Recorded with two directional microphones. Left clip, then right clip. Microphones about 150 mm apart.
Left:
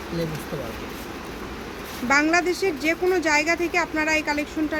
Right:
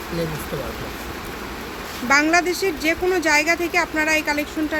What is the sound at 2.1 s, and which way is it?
Speech, 5° left (ahead or behind).